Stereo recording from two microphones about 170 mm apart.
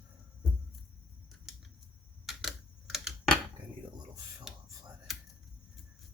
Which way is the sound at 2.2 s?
Centre (ahead or behind).